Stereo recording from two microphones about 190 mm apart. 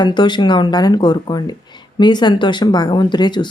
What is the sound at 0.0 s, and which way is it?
Speech, 25° left (ahead or behind).